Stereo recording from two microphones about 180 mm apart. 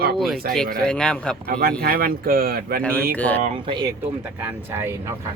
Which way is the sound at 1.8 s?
55° right (ahead or behind).